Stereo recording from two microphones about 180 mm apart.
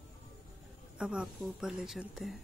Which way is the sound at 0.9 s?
5° right (ahead or behind).